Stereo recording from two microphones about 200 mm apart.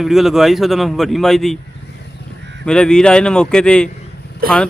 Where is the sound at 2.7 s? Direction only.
5° left (ahead or behind).